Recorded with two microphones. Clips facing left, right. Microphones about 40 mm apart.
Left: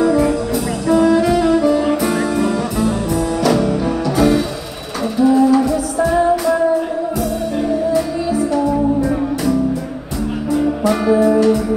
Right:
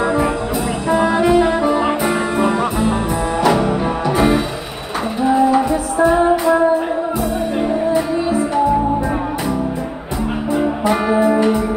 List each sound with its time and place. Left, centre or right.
0.0 s music: right
10.5 s music: right